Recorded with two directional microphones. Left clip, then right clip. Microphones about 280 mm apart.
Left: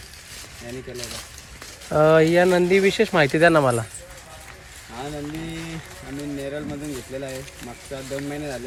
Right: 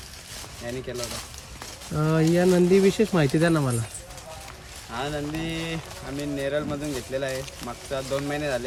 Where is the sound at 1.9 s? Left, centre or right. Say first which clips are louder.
Left 8 dB; centre.